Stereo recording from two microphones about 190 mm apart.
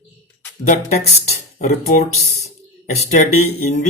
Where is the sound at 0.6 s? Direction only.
35° left (ahead or behind).